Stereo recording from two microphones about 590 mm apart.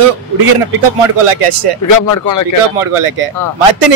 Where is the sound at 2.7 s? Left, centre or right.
Right.